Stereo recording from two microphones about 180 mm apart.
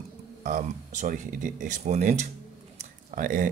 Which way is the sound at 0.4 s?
45° right (ahead or behind).